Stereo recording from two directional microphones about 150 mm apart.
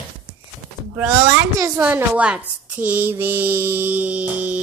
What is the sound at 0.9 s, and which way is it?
Speech, 10° right (ahead or behind).